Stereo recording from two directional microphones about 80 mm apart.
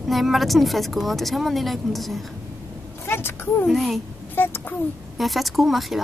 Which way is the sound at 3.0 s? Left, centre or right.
Left.